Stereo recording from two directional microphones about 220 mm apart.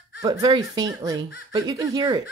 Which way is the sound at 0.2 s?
20° right (ahead or behind).